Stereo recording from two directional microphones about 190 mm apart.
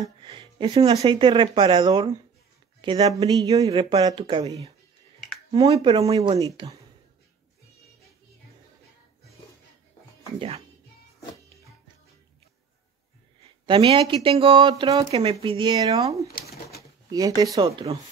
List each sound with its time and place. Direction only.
0.0 s speech: 25° right (ahead or behind)
5.5 s speech: 25° right (ahead or behind)
13.7 s speech: 25° right (ahead or behind)
17.6 s speech: 30° right (ahead or behind)